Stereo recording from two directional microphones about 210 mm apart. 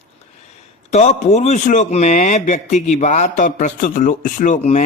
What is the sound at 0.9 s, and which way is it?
A man's voice, 30° left (ahead or behind).